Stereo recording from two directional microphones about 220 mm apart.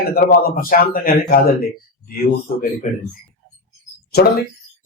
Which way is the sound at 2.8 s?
35° left (ahead or behind).